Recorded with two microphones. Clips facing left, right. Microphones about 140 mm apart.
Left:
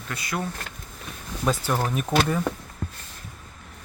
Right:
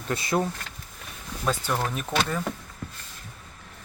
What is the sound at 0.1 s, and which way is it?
Speech, 25° right (ahead or behind).